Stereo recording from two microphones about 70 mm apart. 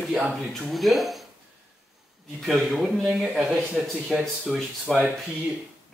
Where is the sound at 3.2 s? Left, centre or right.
Centre.